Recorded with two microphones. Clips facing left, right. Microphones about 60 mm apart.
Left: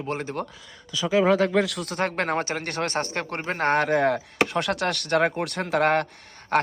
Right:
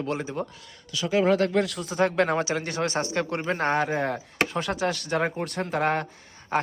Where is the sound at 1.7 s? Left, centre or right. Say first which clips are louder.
Right 2 dB; left.